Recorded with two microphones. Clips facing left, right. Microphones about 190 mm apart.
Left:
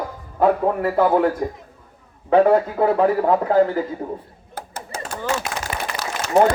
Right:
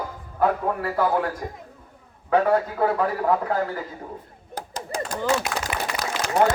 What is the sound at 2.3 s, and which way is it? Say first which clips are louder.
Speech: left 5 dB; 25° left (ahead or behind).